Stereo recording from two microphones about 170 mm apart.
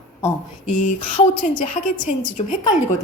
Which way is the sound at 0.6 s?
50° left (ahead or behind).